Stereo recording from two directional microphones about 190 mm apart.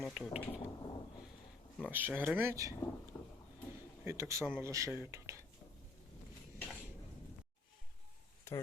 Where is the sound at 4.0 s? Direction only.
15° right (ahead or behind).